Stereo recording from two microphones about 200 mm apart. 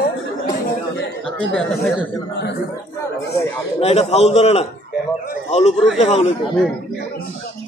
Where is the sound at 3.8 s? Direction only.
30° left (ahead or behind).